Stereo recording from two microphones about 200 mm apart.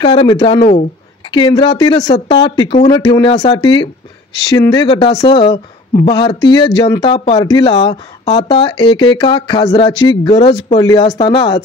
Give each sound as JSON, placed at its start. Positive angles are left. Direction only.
{"t": 0.0, "sound": "speech", "side_deg": 25}